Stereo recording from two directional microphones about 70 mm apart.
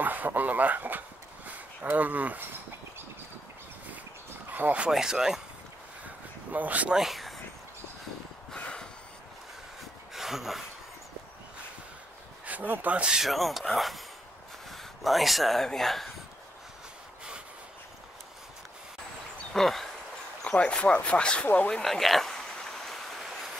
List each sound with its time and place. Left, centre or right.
0.0 s a sound: right
4.5 s speech: right
4.8 s speech: centre
6.5 s speech: right
7.0 s speech: centre
8.5 s snort: centre
10.1 s a sound: centre
12.4 s speech: right
13.2 s speech: centre
19.5 s speech: centre
20.4 s speech: centre
21.6 s a sound: centre